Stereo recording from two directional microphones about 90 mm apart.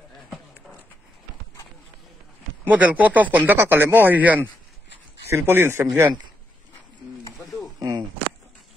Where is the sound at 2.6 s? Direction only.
20° right (ahead or behind).